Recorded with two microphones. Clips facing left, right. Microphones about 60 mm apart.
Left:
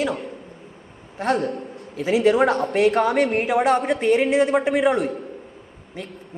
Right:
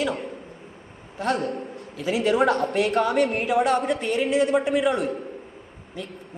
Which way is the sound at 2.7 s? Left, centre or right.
Left.